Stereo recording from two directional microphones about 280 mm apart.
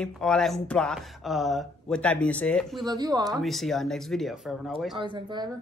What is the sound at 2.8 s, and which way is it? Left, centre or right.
Speech, centre.